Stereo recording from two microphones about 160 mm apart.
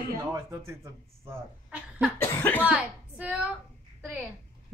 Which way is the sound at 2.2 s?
15° left (ahead or behind).